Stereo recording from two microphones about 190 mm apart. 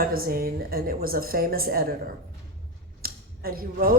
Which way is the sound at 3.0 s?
50° right (ahead or behind).